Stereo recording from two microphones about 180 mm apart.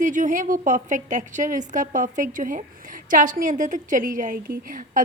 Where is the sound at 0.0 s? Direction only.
45° right (ahead or behind).